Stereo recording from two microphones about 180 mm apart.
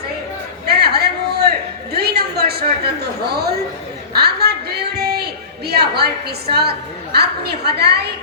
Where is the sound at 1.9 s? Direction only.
60° right (ahead or behind).